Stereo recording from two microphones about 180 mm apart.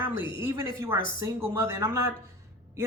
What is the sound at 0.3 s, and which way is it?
A man's voice, 15° right (ahead or behind).